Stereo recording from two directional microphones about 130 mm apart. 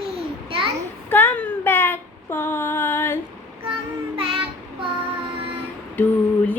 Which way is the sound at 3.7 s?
45° right (ahead or behind).